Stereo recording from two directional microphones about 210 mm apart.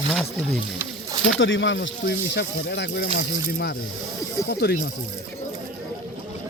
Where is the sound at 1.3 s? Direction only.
65° left (ahead or behind).